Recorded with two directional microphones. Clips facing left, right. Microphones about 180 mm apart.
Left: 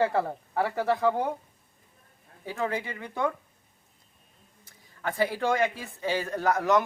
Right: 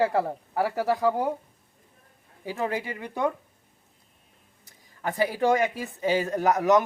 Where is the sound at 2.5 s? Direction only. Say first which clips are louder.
Right 2 dB; 15° right (ahead or behind).